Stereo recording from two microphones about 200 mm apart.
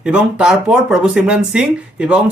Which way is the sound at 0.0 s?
5° right (ahead or behind).